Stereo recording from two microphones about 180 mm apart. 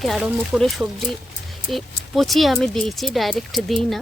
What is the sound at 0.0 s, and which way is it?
Speech, centre (ahead or behind).